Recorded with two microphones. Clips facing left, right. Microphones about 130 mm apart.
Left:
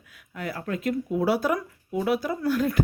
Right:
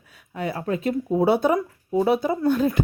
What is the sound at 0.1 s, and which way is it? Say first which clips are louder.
Speech: right 5 dB; 25° right (ahead or behind).